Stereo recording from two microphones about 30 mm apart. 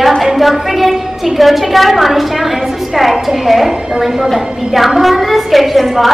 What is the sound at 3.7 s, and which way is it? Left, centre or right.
Speech, right.